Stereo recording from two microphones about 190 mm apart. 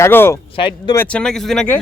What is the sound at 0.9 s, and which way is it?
Speech, 10° left (ahead or behind).